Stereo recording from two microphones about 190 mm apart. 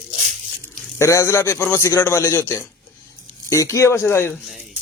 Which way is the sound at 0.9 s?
15° left (ahead or behind).